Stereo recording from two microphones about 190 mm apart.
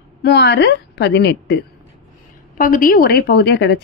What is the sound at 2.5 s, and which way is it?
Speech, 45° left (ahead or behind).